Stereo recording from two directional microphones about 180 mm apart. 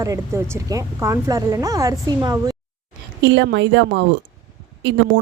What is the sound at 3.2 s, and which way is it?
Speech, 80° right.